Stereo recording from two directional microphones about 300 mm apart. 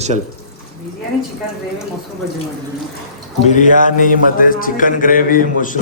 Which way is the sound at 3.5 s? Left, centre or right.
Left.